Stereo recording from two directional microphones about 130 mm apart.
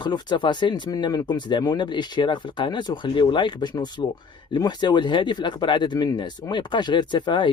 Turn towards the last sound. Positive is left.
turn(degrees=35)  # may be behind; listen again after turning